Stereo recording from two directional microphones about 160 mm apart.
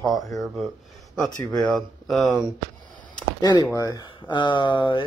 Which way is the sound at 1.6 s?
Centre (ahead or behind).